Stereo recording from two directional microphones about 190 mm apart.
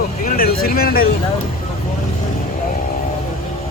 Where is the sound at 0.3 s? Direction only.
50° left (ahead or behind).